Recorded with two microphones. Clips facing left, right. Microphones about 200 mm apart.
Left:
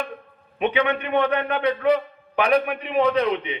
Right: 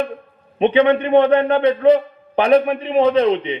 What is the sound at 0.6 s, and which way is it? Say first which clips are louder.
A man's voice: right 8 dB; 30° right (ahead or behind).